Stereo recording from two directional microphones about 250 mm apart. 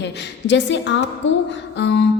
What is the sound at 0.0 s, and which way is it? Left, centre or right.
A woman's voice, left.